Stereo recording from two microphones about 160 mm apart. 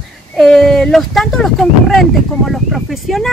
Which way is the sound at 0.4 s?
Centre (ahead or behind).